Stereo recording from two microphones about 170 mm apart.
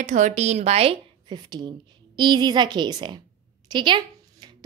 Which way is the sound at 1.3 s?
25° right (ahead or behind).